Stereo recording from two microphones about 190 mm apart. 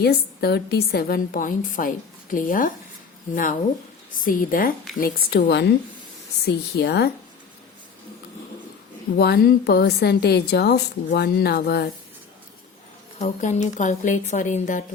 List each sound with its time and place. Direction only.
0.0 s a woman's voice: 55° left (ahead or behind)
4.3 s a woman's voice: 45° left (ahead or behind)
6.7 s a woman's voice: 60° left (ahead or behind)
9.1 s a woman's voice: 60° left (ahead or behind)
13.1 s a woman's voice: 40° left (ahead or behind)